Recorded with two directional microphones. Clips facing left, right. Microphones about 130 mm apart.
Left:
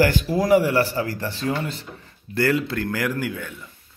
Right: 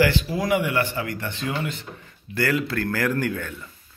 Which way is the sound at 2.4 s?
25° left (ahead or behind).